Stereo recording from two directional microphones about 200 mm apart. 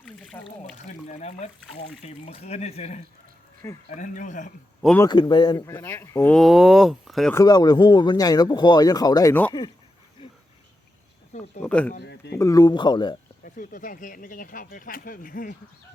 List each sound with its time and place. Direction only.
0.0 s a sound: 5° left (ahead or behind)
0.9 s speech: 35° left (ahead or behind)
4.9 s speech: 20° left (ahead or behind)
5.6 s speech: 10° left (ahead or behind)
7.3 s speech: 20° left (ahead or behind)
11.6 s speech: 5° left (ahead or behind)
11.9 s a sound: 55° left (ahead or behind)
12.4 s speech: 15° left (ahead or behind)
13.4 s speech: 40° left (ahead or behind)